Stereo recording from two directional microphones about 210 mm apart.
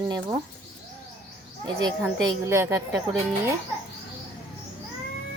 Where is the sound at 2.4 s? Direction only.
10° right (ahead or behind).